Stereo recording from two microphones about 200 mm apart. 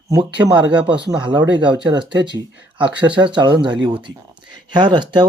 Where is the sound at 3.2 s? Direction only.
25° right (ahead or behind).